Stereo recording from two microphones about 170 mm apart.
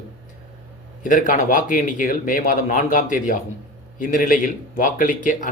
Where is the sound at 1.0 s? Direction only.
50° left (ahead or behind).